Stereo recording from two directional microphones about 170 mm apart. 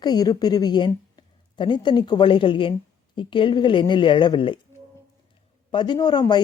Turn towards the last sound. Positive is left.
turn(degrees=25)  # may be behind; listen again after turning